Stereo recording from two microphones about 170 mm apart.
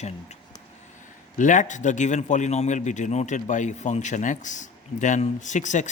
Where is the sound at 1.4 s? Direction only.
50° left (ahead or behind).